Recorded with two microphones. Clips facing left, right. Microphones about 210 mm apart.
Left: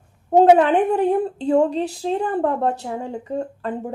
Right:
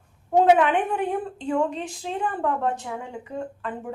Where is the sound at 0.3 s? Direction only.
35° left (ahead or behind).